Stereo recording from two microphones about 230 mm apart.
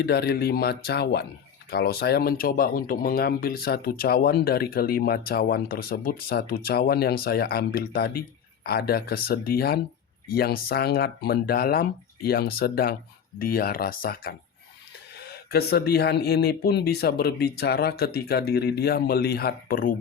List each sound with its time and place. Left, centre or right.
0.0 s speech: left